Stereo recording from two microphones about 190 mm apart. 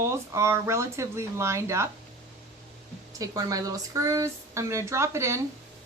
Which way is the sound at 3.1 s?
20° right (ahead or behind).